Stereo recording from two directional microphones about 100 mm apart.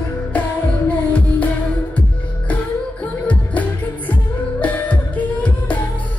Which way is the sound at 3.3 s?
15° left (ahead or behind).